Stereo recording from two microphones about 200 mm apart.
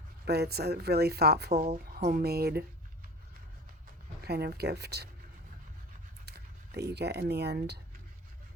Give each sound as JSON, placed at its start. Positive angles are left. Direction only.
{"t": 0.3, "sound": "speech", "side_deg": -50}
{"t": 4.3, "sound": "speech", "side_deg": -50}
{"t": 6.2, "sound": "speech", "side_deg": -55}